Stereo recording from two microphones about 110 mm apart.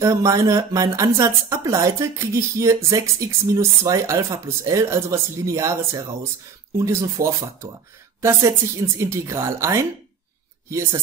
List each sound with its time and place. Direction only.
0.0 s a woman's voice: 30° right (ahead or behind)